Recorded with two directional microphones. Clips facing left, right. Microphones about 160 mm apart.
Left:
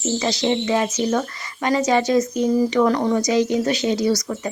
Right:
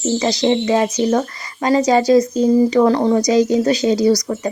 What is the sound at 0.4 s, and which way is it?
A woman's voice, 35° right (ahead or behind).